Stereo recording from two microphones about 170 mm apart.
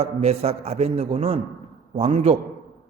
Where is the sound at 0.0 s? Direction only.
35° right (ahead or behind).